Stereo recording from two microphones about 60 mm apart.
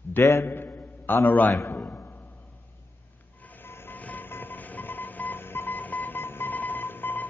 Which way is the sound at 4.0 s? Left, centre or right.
Left.